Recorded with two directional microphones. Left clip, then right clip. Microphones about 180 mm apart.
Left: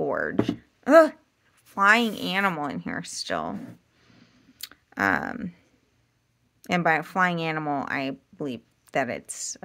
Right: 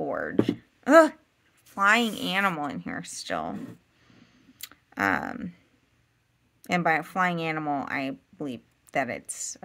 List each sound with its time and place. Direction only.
0.0 s speech: 20° left (ahead or behind)
4.1 s a sound: 10° left (ahead or behind)
6.6 s speech: 15° left (ahead or behind)